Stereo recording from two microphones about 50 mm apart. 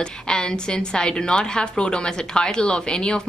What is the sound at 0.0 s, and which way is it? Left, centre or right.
A woman's voice, centre.